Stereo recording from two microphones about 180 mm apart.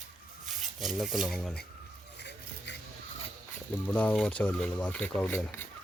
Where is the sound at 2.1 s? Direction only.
70° left (ahead or behind).